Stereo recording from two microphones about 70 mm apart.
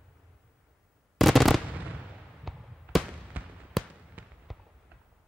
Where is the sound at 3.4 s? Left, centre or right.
Right.